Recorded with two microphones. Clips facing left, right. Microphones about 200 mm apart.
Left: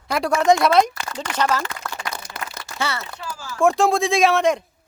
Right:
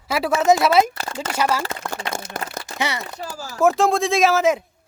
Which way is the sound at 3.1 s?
40° right (ahead or behind).